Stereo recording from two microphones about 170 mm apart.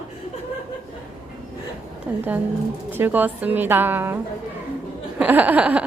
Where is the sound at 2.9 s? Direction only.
10° right (ahead or behind).